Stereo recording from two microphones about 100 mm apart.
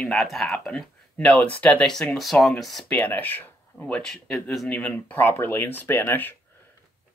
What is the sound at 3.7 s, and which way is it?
Speech, 5° left (ahead or behind).